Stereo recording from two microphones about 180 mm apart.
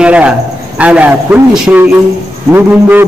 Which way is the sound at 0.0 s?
5° right (ahead or behind).